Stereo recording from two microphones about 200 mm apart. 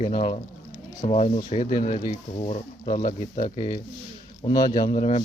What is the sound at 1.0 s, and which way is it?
Speech, 35° left (ahead or behind).